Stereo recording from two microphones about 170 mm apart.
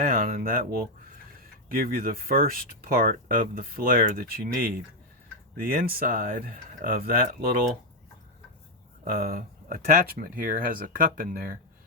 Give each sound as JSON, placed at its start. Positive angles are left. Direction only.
{"t": 0.0, "sound": "speech", "side_deg": -60}
{"t": 9.0, "sound": "speech", "side_deg": -60}